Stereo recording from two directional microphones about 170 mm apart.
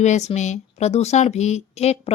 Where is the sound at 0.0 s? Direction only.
40° left (ahead or behind).